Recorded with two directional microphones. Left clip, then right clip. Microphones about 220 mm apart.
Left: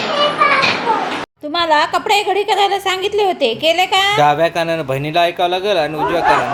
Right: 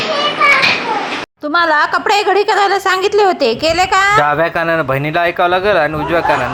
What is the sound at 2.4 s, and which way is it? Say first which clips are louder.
Speech: right 3 dB; 15° right (ahead or behind).